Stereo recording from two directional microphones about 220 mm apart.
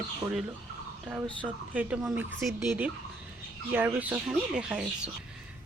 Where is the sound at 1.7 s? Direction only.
5° right (ahead or behind).